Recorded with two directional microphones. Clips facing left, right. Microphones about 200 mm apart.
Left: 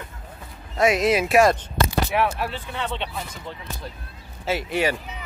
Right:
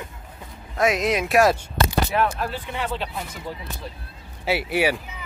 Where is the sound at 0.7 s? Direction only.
Centre (ahead or behind).